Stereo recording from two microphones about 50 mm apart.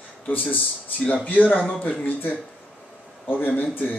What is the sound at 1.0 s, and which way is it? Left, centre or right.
Speech, left.